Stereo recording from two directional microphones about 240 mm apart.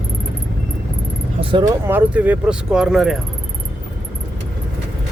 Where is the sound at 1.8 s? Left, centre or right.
Centre.